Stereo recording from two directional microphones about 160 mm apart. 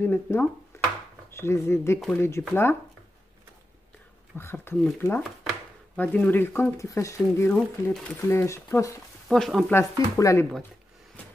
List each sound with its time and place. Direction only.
0.0 s speech: 15° left (ahead or behind)
0.7 s a sound: 15° left (ahead or behind)
1.3 s speech: 15° left (ahead or behind)
4.4 s speech: 15° left (ahead or behind)
5.9 s speech: 10° left (ahead or behind)
9.3 s stir: centre (ahead or behind)
9.7 s speech: 20° left (ahead or behind)